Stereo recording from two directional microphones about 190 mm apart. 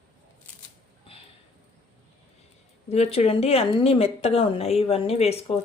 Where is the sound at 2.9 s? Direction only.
35° left (ahead or behind).